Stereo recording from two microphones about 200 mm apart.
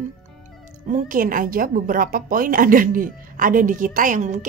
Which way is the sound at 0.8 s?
40° right (ahead or behind).